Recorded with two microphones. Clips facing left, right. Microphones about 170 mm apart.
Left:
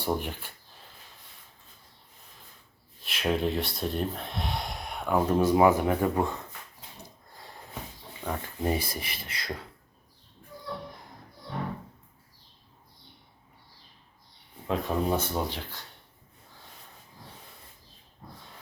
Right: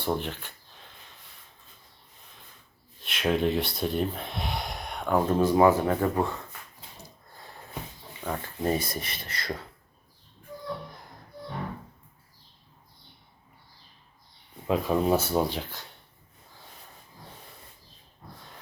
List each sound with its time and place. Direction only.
0.0 s speech: 10° left (ahead or behind)
3.0 s speech: centre (ahead or behind)
5.4 s speech: 15° left (ahead or behind)
8.3 s speech: 15° left (ahead or behind)
14.7 s speech: 5° right (ahead or behind)